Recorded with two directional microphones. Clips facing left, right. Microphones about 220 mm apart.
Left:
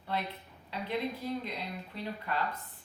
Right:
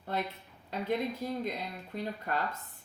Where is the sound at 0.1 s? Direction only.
45° right (ahead or behind).